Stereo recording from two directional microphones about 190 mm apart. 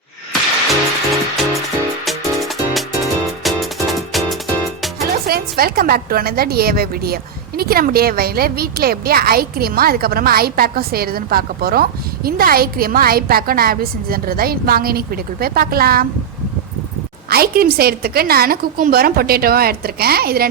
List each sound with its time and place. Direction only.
0.7 s music: centre (ahead or behind)
5.2 s a woman's voice: 55° right (ahead or behind)
17.2 s a woman's voice: 55° right (ahead or behind)